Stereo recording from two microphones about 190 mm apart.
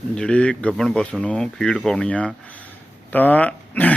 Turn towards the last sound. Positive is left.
turn(degrees=10)  # may be behind; listen again after turning